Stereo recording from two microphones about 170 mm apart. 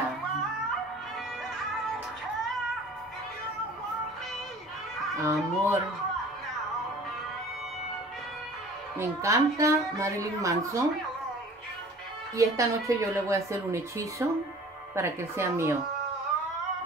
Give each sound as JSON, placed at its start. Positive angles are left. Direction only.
{"t": 5.2, "sound": "a woman's voice", "side_deg": -15}
{"t": 8.9, "sound": "a woman's voice", "side_deg": -15}
{"t": 12.4, "sound": "a woman's voice", "side_deg": -20}